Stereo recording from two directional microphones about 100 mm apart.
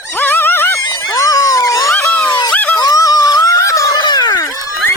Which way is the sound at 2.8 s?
35° left (ahead or behind).